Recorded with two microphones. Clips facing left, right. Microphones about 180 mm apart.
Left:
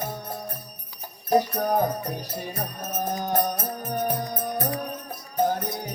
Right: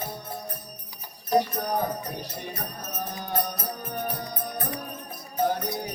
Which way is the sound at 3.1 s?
45° left (ahead or behind).